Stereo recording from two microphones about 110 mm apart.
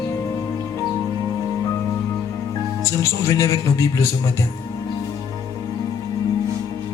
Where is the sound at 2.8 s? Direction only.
25° left (ahead or behind).